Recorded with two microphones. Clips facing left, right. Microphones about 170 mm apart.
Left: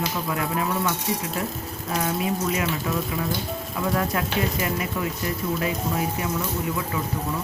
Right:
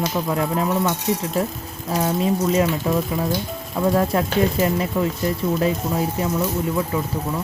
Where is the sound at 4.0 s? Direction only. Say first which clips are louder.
Right 6 dB; 30° right (ahead or behind).